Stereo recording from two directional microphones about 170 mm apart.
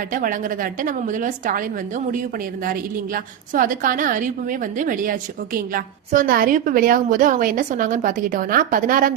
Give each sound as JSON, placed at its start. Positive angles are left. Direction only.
{"t": 0.1, "sound": "a woman's voice", "side_deg": -50}
{"t": 2.6, "sound": "a woman's voice", "side_deg": -55}